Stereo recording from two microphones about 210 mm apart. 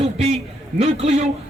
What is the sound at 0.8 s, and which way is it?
Speech, 30° right (ahead or behind).